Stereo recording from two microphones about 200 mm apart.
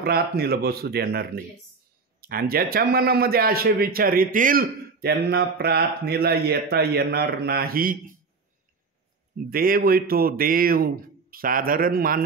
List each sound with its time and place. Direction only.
0.0 s a man's voice: 50° right (ahead or behind)
9.5 s a man's voice: 45° right (ahead or behind)